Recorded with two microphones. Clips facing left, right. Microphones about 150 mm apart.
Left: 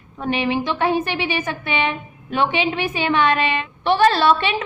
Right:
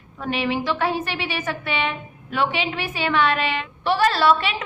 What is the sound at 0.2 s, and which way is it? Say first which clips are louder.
A woman's voice: left 3 dB; 20° left (ahead or behind).